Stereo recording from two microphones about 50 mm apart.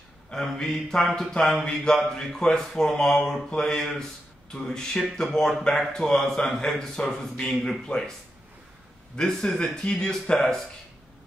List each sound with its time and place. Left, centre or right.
0.3 s a man's voice: centre
9.1 s a man's voice: centre